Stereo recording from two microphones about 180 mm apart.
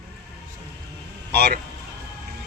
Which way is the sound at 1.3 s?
65° right (ahead or behind).